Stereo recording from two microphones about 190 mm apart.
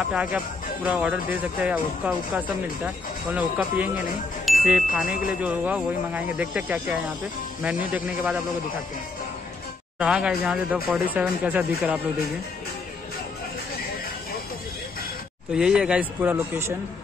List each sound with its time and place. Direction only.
0.1 s speech: 5° right (ahead or behind)
4.5 s music: 5° right (ahead or behind)
5.4 s speech: 5° right (ahead or behind)
9.9 s speech: 5° right (ahead or behind)
15.5 s speech: 5° right (ahead or behind)